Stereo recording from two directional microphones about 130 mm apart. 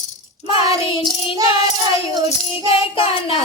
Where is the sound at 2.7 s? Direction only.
45° left (ahead or behind).